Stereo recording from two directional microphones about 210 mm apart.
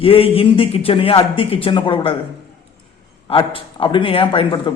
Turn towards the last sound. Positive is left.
turn(degrees=25)  # may be behind; listen again after turning